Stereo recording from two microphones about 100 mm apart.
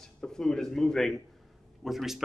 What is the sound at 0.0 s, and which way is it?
Speech, 5° left (ahead or behind).